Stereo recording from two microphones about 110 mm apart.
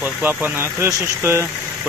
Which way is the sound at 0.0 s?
15° right (ahead or behind).